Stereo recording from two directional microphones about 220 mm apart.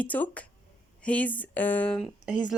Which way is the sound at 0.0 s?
5° left (ahead or behind).